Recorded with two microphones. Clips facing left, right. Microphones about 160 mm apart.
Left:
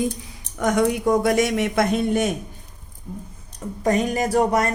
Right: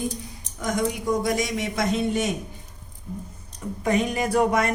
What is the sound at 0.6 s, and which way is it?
A man's voice, 65° left (ahead or behind).